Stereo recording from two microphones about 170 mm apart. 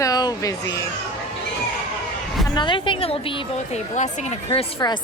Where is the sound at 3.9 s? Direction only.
45° left (ahead or behind).